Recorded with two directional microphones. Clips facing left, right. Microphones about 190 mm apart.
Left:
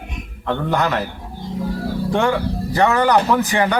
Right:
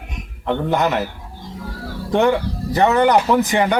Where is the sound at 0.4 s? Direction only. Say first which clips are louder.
Right 1 dB; 15° right (ahead or behind).